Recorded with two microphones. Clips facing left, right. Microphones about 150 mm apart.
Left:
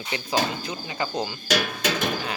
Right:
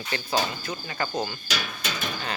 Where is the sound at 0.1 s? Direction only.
15° left (ahead or behind).